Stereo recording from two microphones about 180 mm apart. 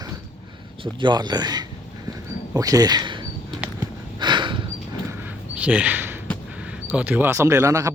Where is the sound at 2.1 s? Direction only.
20° right (ahead or behind).